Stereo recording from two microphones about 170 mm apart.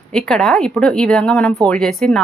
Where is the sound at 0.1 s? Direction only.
5° left (ahead or behind).